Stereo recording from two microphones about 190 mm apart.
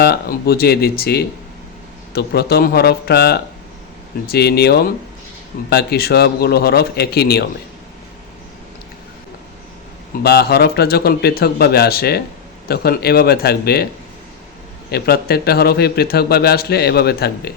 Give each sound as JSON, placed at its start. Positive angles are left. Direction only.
{"t": 0.0, "sound": "speech", "side_deg": 55}
{"t": 10.2, "sound": "speech", "side_deg": 55}
{"t": 14.8, "sound": "speech", "side_deg": 55}